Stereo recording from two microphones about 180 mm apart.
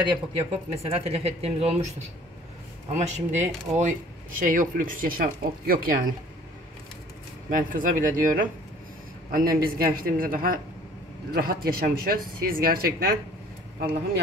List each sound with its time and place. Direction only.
0.1 s speech: 30° right (ahead or behind)
2.9 s speech: 40° right (ahead or behind)
7.4 s speech: 45° right (ahead or behind)